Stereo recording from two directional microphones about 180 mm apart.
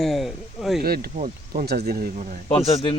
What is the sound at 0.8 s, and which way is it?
Speech, 60° right (ahead or behind).